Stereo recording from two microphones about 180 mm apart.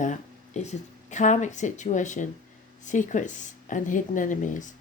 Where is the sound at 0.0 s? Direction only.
40° left (ahead or behind).